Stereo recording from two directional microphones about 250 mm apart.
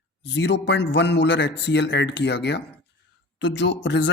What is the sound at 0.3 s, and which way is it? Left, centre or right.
A man's voice, left.